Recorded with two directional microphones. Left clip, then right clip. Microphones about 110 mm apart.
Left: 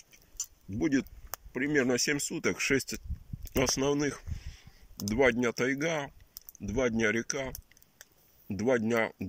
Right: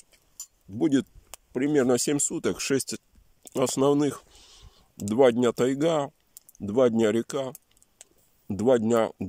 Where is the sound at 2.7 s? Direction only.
20° right (ahead or behind).